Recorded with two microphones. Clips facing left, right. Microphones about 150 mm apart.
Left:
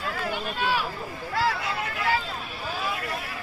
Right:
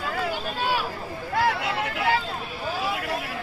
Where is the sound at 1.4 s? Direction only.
65° right (ahead or behind).